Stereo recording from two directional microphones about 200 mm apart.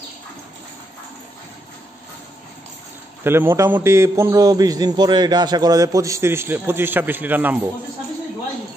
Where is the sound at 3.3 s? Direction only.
10° right (ahead or behind).